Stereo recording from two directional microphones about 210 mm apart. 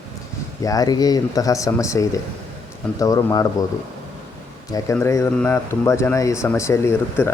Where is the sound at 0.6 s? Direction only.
15° left (ahead or behind).